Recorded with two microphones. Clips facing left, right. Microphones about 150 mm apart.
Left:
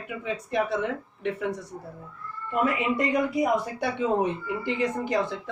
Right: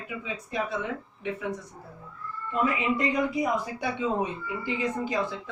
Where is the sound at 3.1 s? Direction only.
55° left (ahead or behind).